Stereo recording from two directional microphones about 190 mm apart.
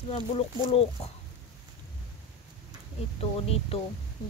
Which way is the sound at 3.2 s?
30° left (ahead or behind).